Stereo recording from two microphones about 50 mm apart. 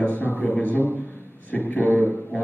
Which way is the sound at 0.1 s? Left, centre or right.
Left.